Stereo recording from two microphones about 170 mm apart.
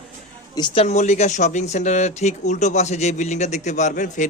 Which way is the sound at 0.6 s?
25° left (ahead or behind).